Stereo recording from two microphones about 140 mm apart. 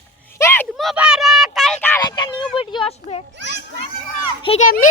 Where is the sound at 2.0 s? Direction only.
30° left (ahead or behind).